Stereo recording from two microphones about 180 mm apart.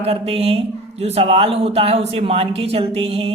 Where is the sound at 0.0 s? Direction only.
35° right (ahead or behind).